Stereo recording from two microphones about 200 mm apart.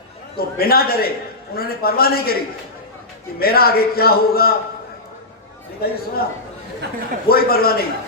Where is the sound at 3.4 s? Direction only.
50° left (ahead or behind).